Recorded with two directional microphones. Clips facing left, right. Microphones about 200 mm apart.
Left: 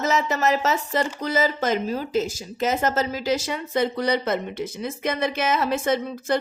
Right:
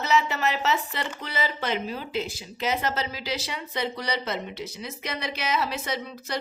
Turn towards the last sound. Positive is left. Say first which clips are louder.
# left 9 dB
turn(degrees=50)  # may be behind; listen again after turning